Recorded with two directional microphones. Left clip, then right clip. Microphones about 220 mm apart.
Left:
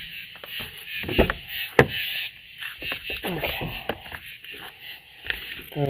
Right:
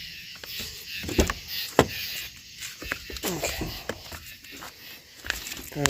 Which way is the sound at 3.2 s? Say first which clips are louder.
Even; 15° right (ahead or behind).